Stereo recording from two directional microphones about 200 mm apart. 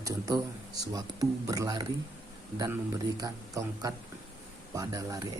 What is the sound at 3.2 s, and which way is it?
Speech, 15° right (ahead or behind).